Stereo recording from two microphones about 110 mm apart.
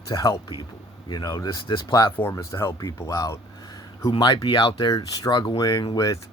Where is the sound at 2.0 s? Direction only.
20° left (ahead or behind); by 6.2 s 35° left (ahead or behind).